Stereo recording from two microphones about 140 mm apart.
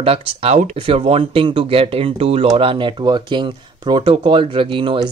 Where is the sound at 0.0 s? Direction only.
45° right (ahead or behind).